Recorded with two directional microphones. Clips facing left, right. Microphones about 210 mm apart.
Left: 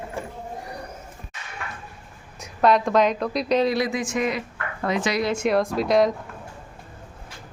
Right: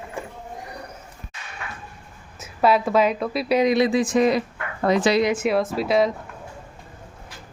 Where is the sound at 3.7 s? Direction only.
25° right (ahead or behind).